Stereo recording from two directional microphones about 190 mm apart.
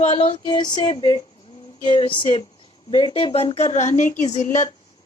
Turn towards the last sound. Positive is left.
turn(degrees=40)  # may be behind; listen again after turning